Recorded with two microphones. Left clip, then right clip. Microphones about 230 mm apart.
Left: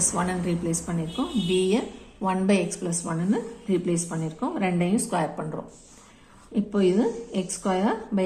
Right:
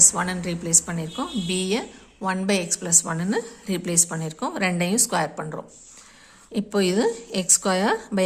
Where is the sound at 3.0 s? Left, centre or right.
Right.